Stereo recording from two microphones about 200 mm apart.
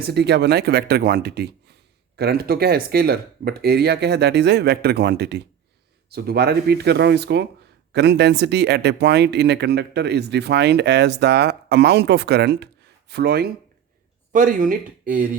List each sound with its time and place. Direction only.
0.0 s speech: 55° right (ahead or behind)